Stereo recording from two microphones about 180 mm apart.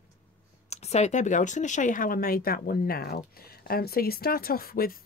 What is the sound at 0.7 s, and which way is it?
Speech, 35° left (ahead or behind).